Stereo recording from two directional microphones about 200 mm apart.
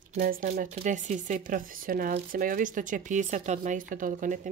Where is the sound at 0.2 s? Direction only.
45° right (ahead or behind).